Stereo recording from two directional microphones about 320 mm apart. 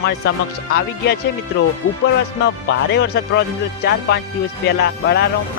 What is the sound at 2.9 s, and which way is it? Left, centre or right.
Speech, left.